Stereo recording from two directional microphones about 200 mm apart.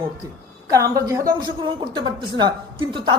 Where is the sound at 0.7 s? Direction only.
15° right (ahead or behind).